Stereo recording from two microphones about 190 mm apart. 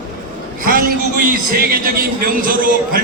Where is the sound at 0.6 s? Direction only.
50° right (ahead or behind).